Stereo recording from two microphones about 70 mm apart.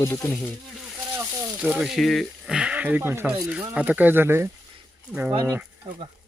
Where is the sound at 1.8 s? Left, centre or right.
Centre.